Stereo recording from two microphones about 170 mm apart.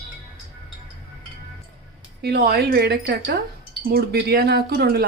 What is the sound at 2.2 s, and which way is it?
Speech, 65° right (ahead or behind).